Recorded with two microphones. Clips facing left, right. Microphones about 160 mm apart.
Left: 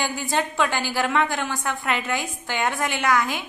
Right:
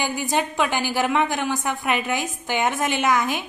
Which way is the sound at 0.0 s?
15° right (ahead or behind).